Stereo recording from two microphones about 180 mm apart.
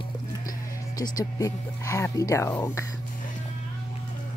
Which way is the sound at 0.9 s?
20° left (ahead or behind).